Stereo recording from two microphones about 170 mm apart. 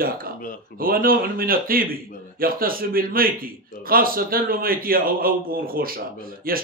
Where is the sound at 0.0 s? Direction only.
60° right (ahead or behind).